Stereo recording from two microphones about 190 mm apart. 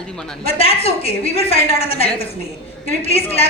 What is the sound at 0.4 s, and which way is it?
A woman's voice, 30° left (ahead or behind).